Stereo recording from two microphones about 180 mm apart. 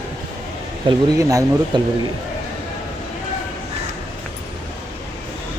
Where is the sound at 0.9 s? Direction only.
20° right (ahead or behind).